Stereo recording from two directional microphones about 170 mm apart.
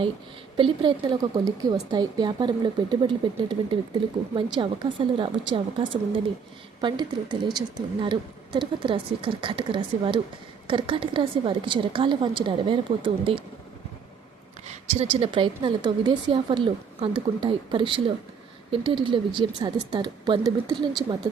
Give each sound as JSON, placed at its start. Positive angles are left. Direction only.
{"t": 0.5, "sound": "speech", "side_deg": -30}
{"t": 14.7, "sound": "speech", "side_deg": -35}